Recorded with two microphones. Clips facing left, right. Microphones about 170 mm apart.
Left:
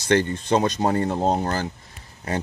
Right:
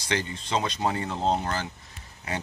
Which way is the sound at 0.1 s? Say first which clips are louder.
Left 9 dB; 55° left (ahead or behind).